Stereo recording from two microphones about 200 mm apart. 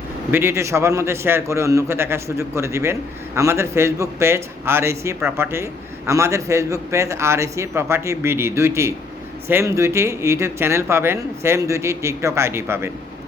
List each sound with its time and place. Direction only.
0.3 s a man's voice: 10° right (ahead or behind)